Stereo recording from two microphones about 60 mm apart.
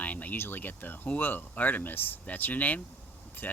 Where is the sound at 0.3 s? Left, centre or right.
Left.